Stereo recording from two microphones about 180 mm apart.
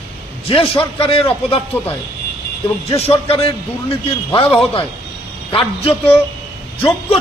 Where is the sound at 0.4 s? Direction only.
30° left (ahead or behind).